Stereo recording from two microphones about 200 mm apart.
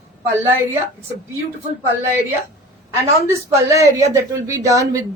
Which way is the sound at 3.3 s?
15° right (ahead or behind).